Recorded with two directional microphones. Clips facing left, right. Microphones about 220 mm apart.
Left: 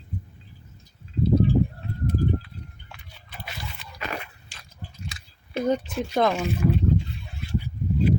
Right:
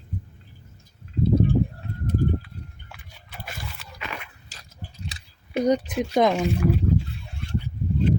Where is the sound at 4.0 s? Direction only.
40° left (ahead or behind).